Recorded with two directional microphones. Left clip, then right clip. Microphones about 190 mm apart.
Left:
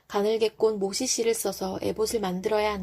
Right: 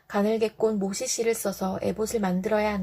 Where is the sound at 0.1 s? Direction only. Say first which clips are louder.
Even; 30° left (ahead or behind).